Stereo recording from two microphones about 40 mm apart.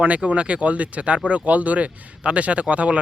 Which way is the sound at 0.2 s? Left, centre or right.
Right.